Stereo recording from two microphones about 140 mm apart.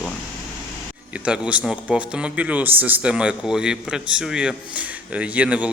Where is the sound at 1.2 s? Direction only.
10° right (ahead or behind).